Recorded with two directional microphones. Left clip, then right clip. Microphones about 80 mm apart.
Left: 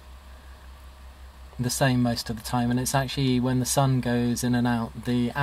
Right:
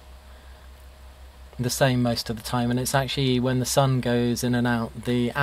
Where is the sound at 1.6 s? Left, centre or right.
Right.